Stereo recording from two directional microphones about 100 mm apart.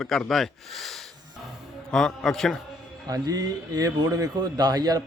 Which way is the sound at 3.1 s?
40° right (ahead or behind).